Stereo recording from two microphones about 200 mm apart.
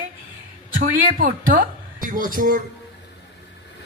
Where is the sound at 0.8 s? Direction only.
40° right (ahead or behind).